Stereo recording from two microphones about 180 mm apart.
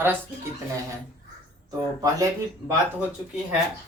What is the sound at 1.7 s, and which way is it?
Speech, 20° right (ahead or behind).